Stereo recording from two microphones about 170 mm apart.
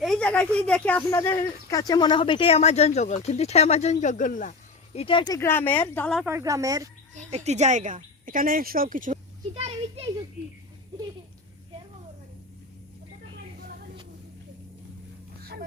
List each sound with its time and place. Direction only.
0.0 s speech: 5° left (ahead or behind); by 4.5 s 50° left (ahead or behind)
4.9 s speech: 30° left (ahead or behind); by 6.1 s 10° left (ahead or behind)
6.2 s speech: 15° right (ahead or behind)
7.1 s a woman's voice: 40° right (ahead or behind)
9.6 s a child's voice: 35° right (ahead or behind)